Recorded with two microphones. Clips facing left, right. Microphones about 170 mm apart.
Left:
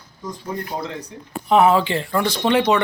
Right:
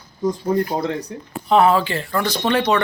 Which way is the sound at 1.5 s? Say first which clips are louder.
Even; 20° left (ahead or behind).